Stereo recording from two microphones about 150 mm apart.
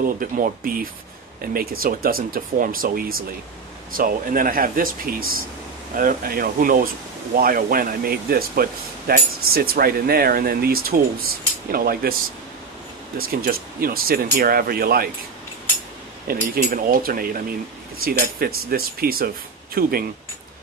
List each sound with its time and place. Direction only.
0.0 s speech: 70° right (ahead or behind)
1.4 s speech: 80° right
13.2 s speech: 80° right
16.3 s speech: 75° right (ahead or behind)